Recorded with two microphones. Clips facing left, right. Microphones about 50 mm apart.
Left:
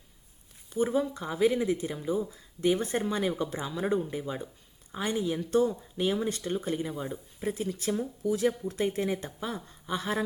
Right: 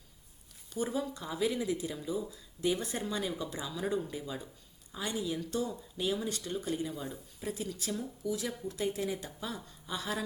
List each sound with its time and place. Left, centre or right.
0.7 s speech: left